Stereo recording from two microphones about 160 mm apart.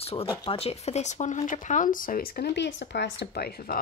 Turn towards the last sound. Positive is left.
turn(degrees=70)  # may be behind; listen again after turning